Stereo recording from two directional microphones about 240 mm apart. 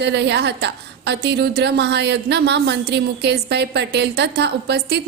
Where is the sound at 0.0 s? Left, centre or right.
Right.